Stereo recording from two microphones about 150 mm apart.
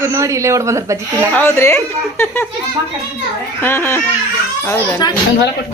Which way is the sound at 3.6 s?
15° left (ahead or behind).